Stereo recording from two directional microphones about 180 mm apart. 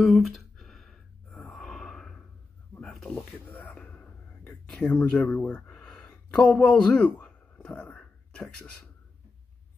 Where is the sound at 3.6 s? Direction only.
5° left (ahead or behind).